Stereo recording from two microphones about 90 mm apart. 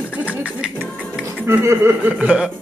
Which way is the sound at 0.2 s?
15° right (ahead or behind).